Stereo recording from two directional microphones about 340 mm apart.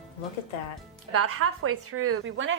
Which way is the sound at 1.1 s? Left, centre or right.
Right.